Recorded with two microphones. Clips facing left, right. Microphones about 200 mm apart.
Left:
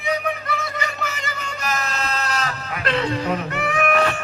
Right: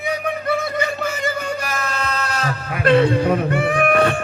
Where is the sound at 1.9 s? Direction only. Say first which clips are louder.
Right 1 dB; 50° right (ahead or behind).